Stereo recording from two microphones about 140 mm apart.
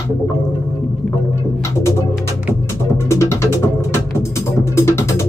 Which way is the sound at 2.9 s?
20° left (ahead or behind).